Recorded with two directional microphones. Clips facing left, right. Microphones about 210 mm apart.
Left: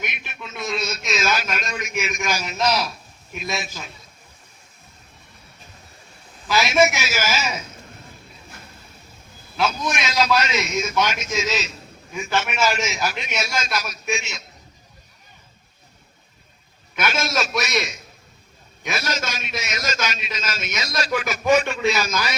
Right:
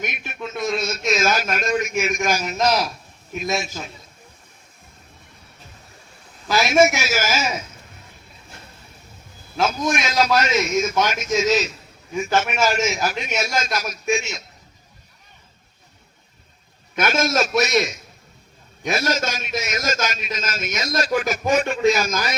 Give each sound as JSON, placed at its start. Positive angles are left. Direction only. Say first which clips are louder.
{"t": 0.0, "sound": "a sound", "louder": "right 5 dB", "side_deg": -45}
{"t": 6.5, "sound": "a man's voice", "louder": "right 2 dB", "side_deg": -45}
{"t": 9.6, "sound": "a man's voice", "louder": "right 2 dB", "side_deg": -45}
{"t": 16.9, "sound": "a man's voice", "louder": "right 4 dB", "side_deg": -45}